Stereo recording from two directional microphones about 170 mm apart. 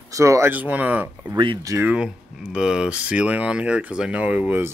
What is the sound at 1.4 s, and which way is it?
Speech, 25° right (ahead or behind).